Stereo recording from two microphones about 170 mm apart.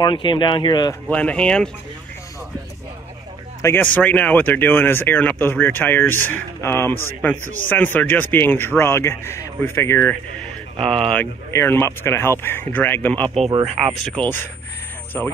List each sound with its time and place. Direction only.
0.0 s speech: 25° left (ahead or behind)
1.1 s speech: 5° left (ahead or behind)
3.6 s speech: 10° left (ahead or behind)
11.5 s speech: 15° left (ahead or behind)